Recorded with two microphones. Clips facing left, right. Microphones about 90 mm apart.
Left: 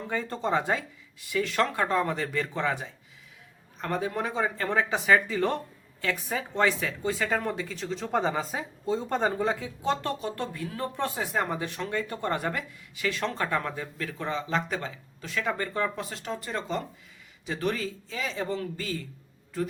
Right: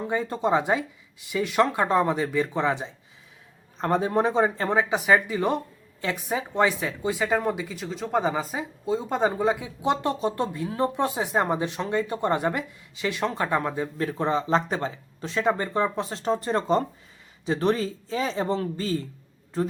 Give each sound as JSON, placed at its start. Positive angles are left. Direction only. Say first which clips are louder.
{"t": 0.0, "sound": "speech", "louder": "right 5 dB", "side_deg": -20}